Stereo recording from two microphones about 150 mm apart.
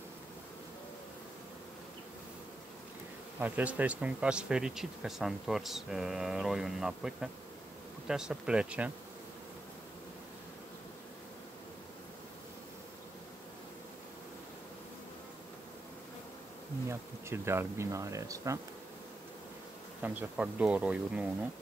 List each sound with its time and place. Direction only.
3.3 s speech: 10° right (ahead or behind)
17.3 s speech: 15° right (ahead or behind)
20.0 s speech: 10° right (ahead or behind)